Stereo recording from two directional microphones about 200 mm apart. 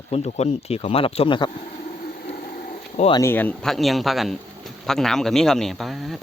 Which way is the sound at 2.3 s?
45° left (ahead or behind).